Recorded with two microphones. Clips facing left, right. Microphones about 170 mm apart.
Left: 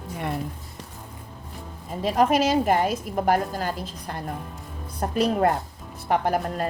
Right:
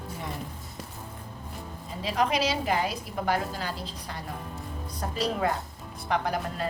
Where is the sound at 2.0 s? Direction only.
45° left (ahead or behind).